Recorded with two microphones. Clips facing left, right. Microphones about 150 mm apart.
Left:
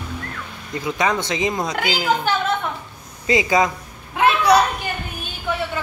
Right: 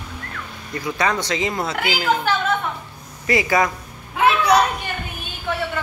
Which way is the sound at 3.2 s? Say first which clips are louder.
Left 1 dB; 20° left (ahead or behind).